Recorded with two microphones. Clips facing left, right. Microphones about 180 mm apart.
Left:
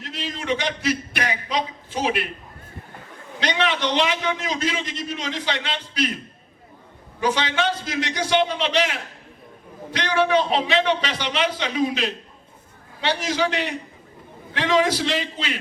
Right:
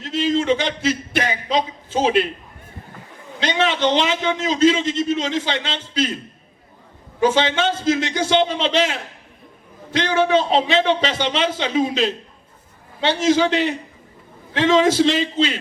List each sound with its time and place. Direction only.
0.0 s a sound: 25° right (ahead or behind)
3.4 s a man's voice: 25° right (ahead or behind)
7.2 s a man's voice: 25° right (ahead or behind)